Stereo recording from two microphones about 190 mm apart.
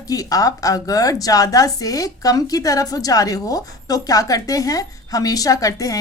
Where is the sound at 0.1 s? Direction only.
20° left (ahead or behind).